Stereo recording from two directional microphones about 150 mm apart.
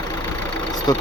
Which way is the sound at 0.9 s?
25° left (ahead or behind).